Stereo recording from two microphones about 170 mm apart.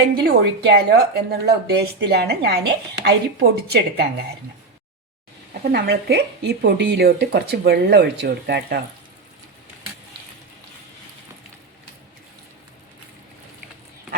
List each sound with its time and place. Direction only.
0.2 s a woman's voice: 75° right (ahead or behind)
5.7 s a woman's voice: 70° right (ahead or behind)